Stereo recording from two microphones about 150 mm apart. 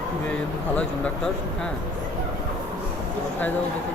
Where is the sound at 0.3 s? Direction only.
10° left (ahead or behind).